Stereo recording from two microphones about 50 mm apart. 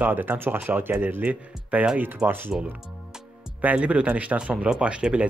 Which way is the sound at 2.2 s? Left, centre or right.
Right.